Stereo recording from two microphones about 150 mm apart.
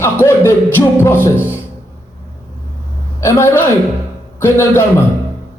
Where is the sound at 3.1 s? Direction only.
20° left (ahead or behind).